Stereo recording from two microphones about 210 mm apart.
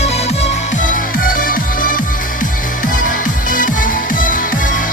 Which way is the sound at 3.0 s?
40° left (ahead or behind).